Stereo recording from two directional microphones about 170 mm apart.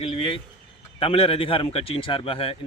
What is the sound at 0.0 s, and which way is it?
A man's voice, 30° left (ahead or behind).